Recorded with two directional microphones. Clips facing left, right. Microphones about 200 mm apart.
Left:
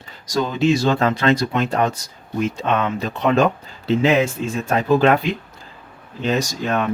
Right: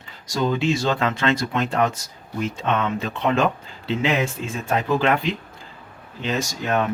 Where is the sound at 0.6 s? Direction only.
40° left (ahead or behind).